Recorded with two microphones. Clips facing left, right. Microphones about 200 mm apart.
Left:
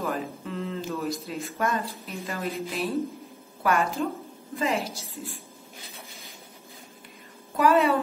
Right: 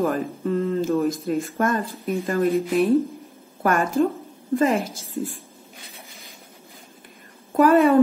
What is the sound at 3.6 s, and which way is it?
Speech, 50° right (ahead or behind).